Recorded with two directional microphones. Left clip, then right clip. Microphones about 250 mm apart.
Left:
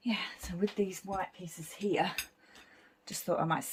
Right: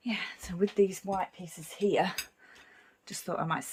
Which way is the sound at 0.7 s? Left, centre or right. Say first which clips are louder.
Right 8 dB; centre.